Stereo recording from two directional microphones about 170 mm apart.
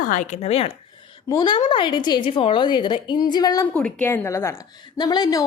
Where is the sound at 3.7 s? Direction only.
10° left (ahead or behind).